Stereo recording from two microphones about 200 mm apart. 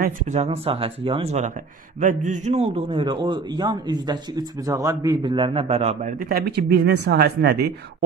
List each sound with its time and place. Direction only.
0.0 s a man's voice: 35° right (ahead or behind); by 7.7 s 50° right (ahead or behind)